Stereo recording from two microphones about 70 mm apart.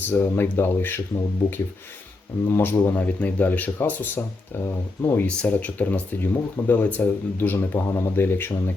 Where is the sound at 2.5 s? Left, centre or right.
Left.